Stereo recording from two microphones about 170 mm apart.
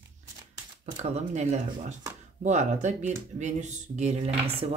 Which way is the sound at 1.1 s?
40° right (ahead or behind).